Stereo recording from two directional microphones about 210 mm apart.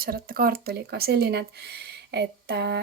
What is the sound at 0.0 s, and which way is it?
Speech, 45° right (ahead or behind).